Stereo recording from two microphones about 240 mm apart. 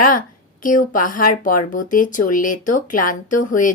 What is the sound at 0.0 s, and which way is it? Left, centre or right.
Speech, left.